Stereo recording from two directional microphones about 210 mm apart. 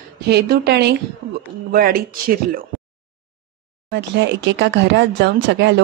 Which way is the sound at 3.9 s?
55° right (ahead or behind).